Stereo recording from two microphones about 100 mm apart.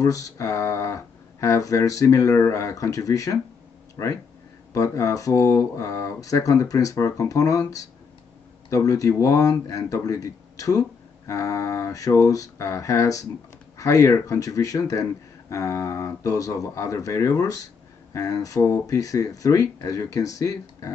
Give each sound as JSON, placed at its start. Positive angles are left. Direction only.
{"t": 0.0, "sound": "speech", "side_deg": 35}
{"t": 8.6, "sound": "speech", "side_deg": 30}